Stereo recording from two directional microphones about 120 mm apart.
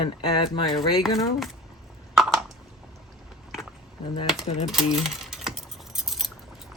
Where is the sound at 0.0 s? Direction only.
45° left (ahead or behind).